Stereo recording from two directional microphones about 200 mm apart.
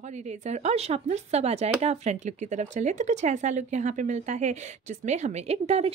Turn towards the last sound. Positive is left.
turn(degrees=-30)  # may be behind; listen again after turning